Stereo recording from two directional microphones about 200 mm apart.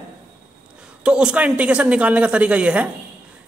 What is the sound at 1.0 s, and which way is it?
Speech, 5° right (ahead or behind).